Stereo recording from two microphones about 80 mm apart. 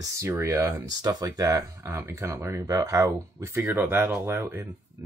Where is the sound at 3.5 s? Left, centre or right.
Right.